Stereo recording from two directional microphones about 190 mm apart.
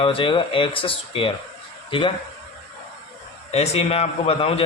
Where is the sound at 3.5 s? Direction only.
35° left (ahead or behind).